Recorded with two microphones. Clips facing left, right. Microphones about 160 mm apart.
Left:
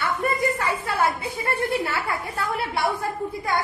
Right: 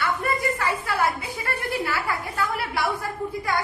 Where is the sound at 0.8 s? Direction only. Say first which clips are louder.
Left 1 dB; 25° left (ahead or behind).